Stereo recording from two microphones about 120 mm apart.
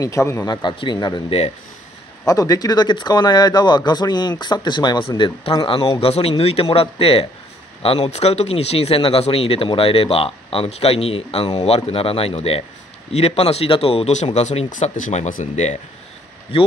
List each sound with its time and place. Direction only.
0.0 s a man's voice: 25° left (ahead or behind)
0.5 s speech: 40° left (ahead or behind)
2.2 s speech: 30° left (ahead or behind); by 14.1 s 55° left (ahead or behind)
14.2 s speech: 65° left (ahead or behind)